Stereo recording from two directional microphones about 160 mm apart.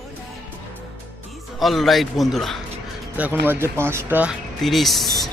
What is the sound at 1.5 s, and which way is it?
Speech, centre (ahead or behind).